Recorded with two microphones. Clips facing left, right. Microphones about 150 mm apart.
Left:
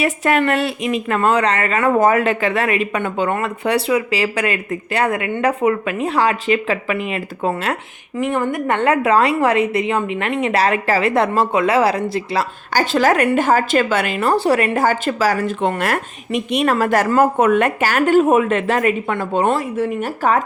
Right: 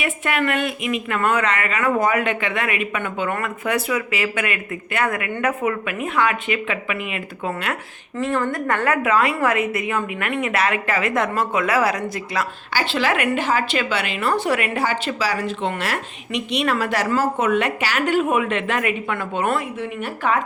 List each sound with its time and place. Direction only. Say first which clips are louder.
0.0 s speech: left 6 dB; 40° left (ahead or behind)
8.2 s a woman's voice: left 3 dB; 20° left (ahead or behind)
12.7 s a woman's voice: left 6 dB; 45° left (ahead or behind)